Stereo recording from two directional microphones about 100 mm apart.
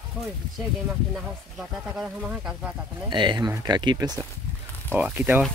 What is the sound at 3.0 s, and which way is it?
Speech, 50° right (ahead or behind).